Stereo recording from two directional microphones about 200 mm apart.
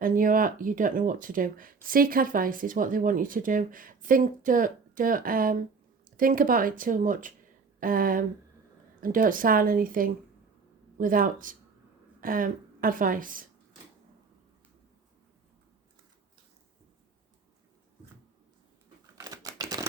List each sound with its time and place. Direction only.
0.0 s a woman's voice: 45° right (ahead or behind)
19.1 s typewriter: 15° right (ahead or behind)